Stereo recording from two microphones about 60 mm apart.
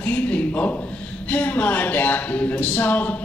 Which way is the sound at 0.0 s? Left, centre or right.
Left.